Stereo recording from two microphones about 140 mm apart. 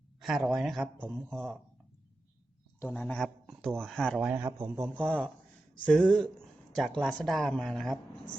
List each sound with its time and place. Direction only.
0.2 s speech: centre (ahead or behind)
2.8 s speech: 10° left (ahead or behind)
4.4 s a man's voice: 15° right (ahead or behind)
5.0 s speech: centre (ahead or behind)